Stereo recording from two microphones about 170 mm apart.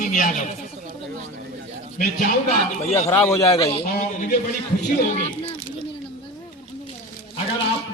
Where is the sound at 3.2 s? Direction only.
35° left (ahead or behind).